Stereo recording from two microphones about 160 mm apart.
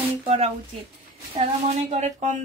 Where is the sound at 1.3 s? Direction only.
40° right (ahead or behind).